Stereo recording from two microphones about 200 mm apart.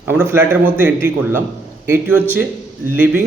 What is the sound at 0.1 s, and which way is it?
A man's voice, 10° right (ahead or behind).